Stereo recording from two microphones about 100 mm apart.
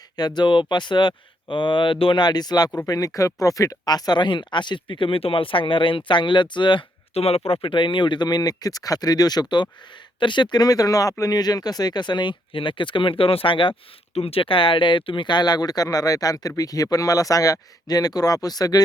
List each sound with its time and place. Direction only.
0.2 s speech: 45° left (ahead or behind)
7.1 s speech: 90° left; by 18.8 s 40° left (ahead or behind)